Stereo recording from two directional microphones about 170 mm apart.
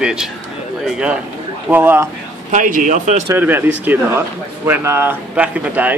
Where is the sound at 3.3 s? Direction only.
10° right (ahead or behind).